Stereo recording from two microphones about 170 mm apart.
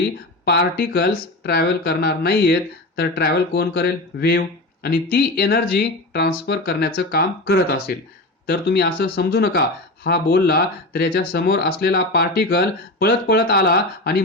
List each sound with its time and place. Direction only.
0.4 s speech: 70° left (ahead or behind)